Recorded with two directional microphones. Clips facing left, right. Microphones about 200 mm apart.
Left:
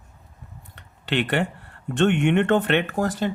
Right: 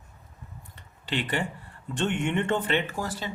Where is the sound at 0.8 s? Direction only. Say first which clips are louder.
Left 6 dB; 70° left (ahead or behind).